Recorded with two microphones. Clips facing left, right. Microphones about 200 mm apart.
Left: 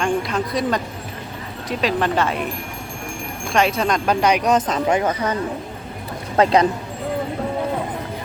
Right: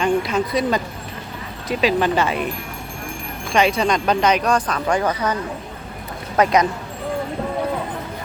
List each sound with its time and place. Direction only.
0.0 s speech: centre (ahead or behind)
3.5 s speech: centre (ahead or behind); by 6.7 s 30° left (ahead or behind)